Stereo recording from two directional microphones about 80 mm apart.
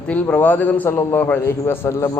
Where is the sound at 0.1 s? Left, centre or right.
Centre.